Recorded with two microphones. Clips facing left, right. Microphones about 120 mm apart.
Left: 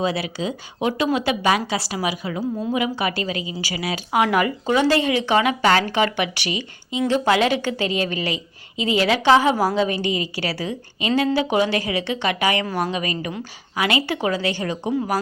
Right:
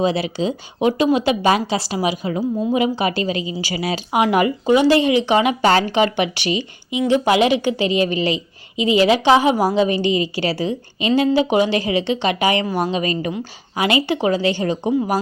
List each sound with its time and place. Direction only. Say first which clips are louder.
0.0 s speech: right 4 dB; 25° right (ahead or behind)